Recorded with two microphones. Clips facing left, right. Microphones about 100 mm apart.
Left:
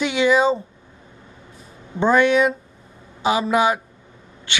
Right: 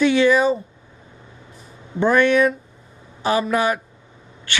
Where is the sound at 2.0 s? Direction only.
20° left (ahead or behind).